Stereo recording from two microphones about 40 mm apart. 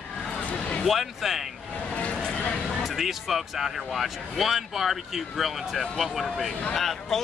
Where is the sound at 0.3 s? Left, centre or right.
Left.